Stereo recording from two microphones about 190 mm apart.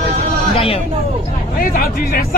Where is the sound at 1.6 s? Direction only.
50° left (ahead or behind).